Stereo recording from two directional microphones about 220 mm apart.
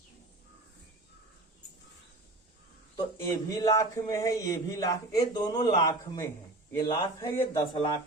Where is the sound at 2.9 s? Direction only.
15° left (ahead or behind).